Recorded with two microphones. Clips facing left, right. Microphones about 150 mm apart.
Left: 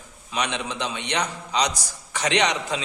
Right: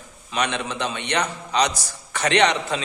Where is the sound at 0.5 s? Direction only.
60° right (ahead or behind).